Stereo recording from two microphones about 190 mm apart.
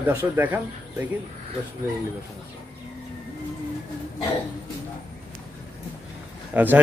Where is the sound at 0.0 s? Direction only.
10° right (ahead or behind).